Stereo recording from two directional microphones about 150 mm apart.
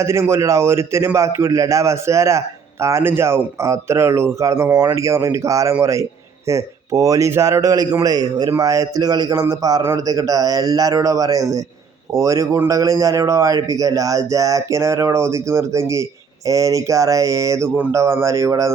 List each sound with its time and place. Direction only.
0.0 s a man's voice: 15° right (ahead or behind)